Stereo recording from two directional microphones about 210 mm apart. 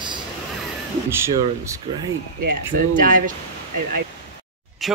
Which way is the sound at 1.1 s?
15° right (ahead or behind).